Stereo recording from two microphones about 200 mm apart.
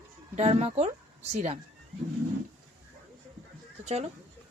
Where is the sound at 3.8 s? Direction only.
35° right (ahead or behind).